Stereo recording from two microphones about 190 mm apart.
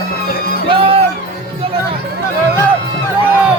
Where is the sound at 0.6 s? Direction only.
30° right (ahead or behind).